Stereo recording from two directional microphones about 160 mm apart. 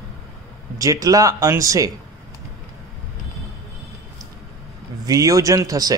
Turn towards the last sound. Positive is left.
turn(degrees=-25)  # may be behind; listen again after turning